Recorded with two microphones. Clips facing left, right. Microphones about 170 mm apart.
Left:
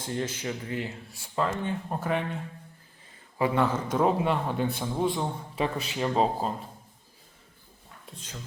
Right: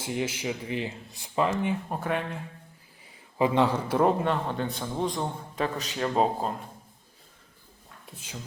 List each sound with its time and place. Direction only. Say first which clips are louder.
0.0 s speech: right 1 dB; 10° right (ahead or behind)
1.9 s a man's voice: left 1 dB; centre (ahead or behind)
3.3 s speech: right 2 dB; 20° right (ahead or behind)
3.9 s a man's voice: right 1 dB; 5° left (ahead or behind)
8.0 s speech: right 1 dB; 10° right (ahead or behind)